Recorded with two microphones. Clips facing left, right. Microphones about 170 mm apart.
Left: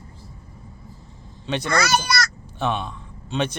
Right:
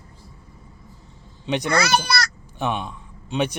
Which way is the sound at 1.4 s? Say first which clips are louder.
Right 1 dB; 15° right (ahead or behind).